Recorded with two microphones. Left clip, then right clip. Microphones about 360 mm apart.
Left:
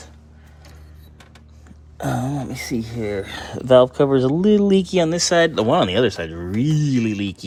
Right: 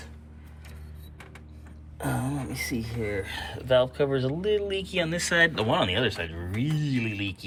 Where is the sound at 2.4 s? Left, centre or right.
Left.